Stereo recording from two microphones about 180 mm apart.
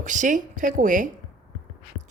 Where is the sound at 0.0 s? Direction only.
45° right (ahead or behind).